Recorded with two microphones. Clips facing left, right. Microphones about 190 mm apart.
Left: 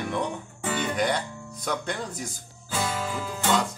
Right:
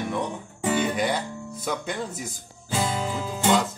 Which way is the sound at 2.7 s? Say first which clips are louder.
Right 3 dB; 15° right (ahead or behind).